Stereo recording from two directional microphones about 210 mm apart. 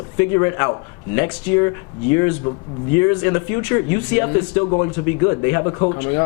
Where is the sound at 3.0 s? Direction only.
15° left (ahead or behind).